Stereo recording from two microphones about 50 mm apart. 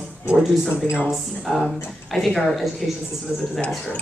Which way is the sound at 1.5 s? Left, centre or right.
Centre.